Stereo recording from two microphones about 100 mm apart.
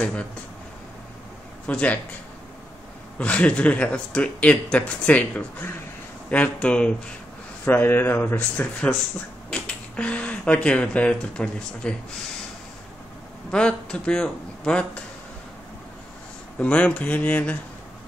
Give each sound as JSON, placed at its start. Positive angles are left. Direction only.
{"t": 1.7, "sound": "speech", "side_deg": 15}
{"t": 3.2, "sound": "speech", "side_deg": 15}
{"t": 13.5, "sound": "a man's voice", "side_deg": 10}
{"t": 16.5, "sound": "speech", "side_deg": 15}